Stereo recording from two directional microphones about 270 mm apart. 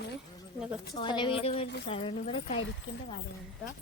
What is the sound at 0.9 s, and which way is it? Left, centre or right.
Speech, centre.